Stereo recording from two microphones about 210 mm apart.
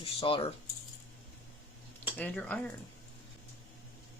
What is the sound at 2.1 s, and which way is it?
Speech, 5° left (ahead or behind).